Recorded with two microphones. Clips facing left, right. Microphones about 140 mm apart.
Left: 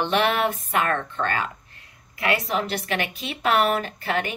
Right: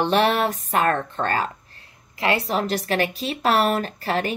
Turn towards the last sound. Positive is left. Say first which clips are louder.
# right 2 dB
turn(degrees=-35)  # may be behind; listen again after turning